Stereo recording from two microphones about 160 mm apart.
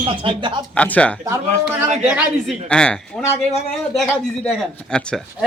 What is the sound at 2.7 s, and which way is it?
Speech, 5° left (ahead or behind).